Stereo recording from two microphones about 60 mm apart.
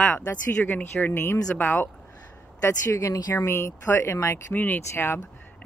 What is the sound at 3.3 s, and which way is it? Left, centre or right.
Speech, left.